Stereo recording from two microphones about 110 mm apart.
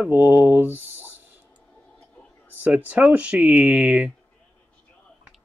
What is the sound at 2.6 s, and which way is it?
Speech, 10° right (ahead or behind).